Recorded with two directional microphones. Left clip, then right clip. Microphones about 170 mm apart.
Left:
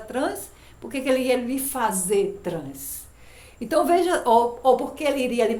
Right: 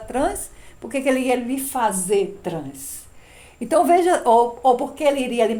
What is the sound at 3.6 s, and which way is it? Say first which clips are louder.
A woman's voice: right 4 dB; 40° right (ahead or behind).